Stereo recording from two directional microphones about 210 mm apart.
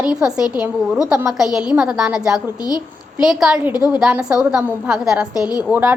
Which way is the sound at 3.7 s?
20° left (ahead or behind).